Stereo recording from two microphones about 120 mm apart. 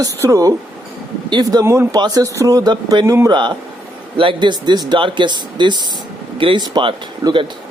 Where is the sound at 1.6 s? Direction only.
20° right (ahead or behind).